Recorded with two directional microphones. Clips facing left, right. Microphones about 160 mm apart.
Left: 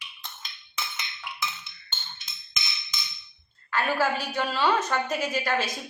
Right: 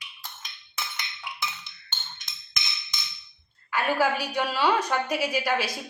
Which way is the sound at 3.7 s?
10° right (ahead or behind).